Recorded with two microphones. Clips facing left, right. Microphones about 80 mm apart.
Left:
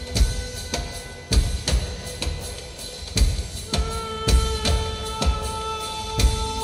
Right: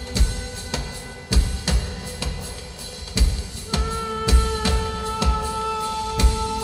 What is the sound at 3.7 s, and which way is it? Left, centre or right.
Music, right.